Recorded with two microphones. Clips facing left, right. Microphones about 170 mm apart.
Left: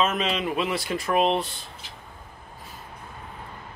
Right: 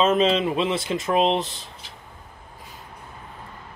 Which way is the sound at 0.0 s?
30° right (ahead or behind).